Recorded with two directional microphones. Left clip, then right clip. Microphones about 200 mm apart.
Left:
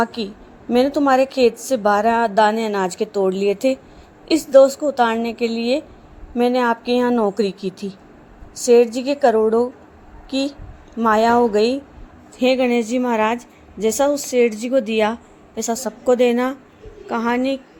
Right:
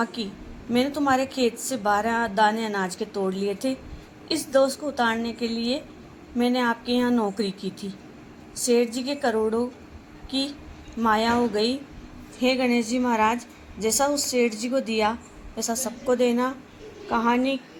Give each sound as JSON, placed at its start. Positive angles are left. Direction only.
{"t": 0.0, "sound": "a woman's voice", "side_deg": 55}